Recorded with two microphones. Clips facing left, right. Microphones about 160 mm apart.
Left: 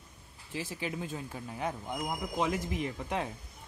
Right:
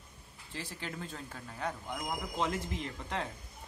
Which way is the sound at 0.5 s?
15° left (ahead or behind).